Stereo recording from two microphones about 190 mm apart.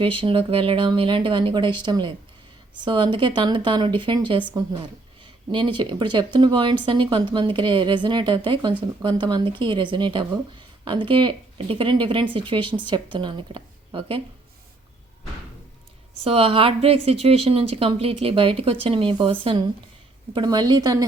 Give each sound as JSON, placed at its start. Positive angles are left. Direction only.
{"t": 0.0, "sound": "speech", "side_deg": -30}
{"t": 16.2, "sound": "a woman's voice", "side_deg": -30}